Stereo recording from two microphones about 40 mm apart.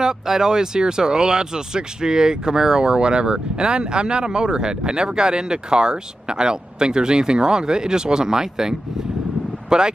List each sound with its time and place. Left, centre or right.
0.0 s speech: centre